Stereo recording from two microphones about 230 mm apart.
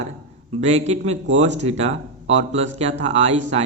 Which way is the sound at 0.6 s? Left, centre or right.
Right.